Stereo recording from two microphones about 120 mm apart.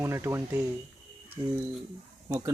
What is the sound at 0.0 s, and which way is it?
Speech, 20° right (ahead or behind).